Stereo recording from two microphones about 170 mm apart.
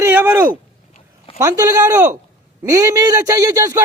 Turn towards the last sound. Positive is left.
turn(degrees=-20)  # may be behind; listen again after turning